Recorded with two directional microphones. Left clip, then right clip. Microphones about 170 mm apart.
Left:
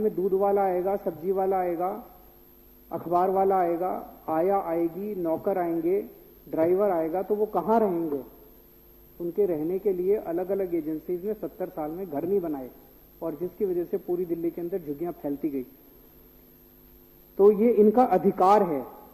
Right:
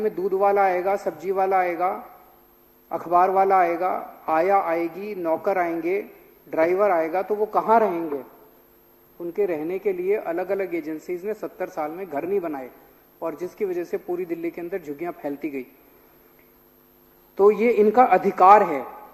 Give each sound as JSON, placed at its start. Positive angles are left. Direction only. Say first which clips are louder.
{"t": 0.0, "sound": "a man's voice", "louder": "right 3 dB", "side_deg": -20}
{"t": 9.3, "sound": "a woman's voice", "louder": "right 1 dB", "side_deg": -15}
{"t": 17.3, "sound": "a man's voice", "louder": "right 2 dB", "side_deg": -20}